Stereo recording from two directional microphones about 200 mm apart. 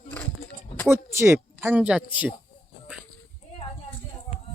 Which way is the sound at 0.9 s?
15° right (ahead or behind).